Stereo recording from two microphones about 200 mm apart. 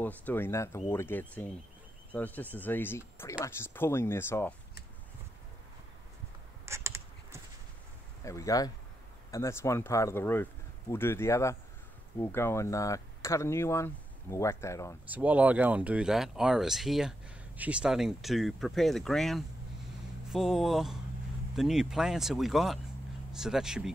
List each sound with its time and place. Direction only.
0.0 s speech: 10° left (ahead or behind)
6.6 s a sound: 15° right (ahead or behind)
8.2 s speech: 15° left (ahead or behind)
15.0 s speech: 10° right (ahead or behind)